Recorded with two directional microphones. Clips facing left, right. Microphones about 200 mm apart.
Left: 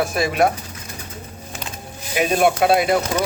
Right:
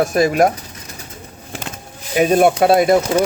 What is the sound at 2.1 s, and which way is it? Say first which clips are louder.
Speech: right 5 dB; 40° right (ahead or behind).